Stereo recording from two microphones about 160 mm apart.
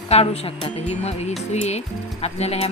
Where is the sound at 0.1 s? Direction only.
40° left (ahead or behind).